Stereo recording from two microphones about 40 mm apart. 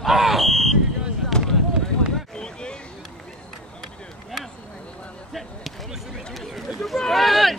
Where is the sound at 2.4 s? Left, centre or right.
Left.